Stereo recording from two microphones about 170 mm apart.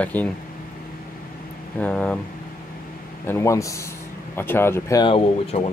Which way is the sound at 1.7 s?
5° left (ahead or behind).